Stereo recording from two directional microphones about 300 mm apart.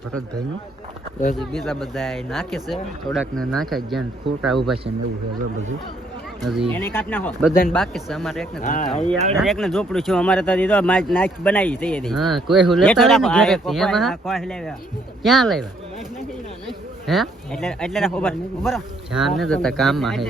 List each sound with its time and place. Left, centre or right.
1.4 s speech: centre
6.4 s speech: centre
8.6 s speech: left
9.4 s speech: centre
16.6 s speech: centre